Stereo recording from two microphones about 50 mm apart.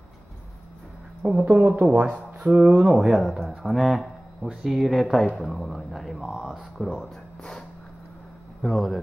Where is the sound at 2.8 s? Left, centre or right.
Centre.